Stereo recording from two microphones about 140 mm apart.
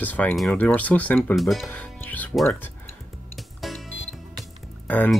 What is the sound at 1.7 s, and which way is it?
Music, 10° left (ahead or behind).